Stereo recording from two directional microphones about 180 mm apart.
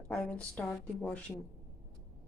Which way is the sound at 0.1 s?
5° left (ahead or behind).